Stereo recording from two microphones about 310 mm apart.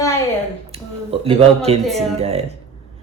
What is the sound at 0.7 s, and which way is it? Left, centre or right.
Speech, centre.